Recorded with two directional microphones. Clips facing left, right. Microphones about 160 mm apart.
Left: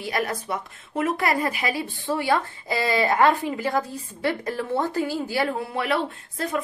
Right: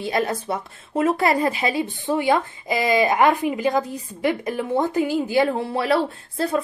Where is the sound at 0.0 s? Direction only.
25° right (ahead or behind).